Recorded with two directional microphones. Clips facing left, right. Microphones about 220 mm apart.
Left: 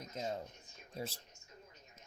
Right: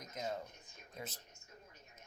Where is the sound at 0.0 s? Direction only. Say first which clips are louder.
Left 1 dB; 30° left (ahead or behind).